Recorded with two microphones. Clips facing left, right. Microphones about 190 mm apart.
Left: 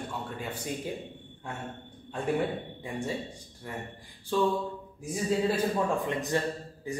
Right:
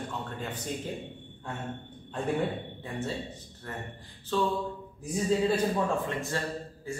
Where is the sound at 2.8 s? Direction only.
15° left (ahead or behind).